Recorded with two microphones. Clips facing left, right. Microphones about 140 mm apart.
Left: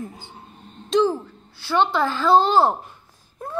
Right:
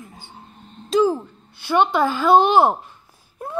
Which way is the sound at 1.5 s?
15° right (ahead or behind).